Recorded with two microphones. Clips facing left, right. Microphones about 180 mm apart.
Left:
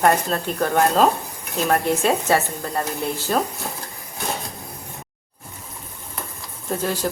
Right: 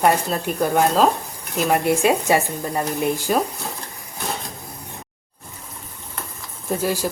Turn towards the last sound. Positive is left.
turn(degrees=-10)  # may be behind; listen again after turning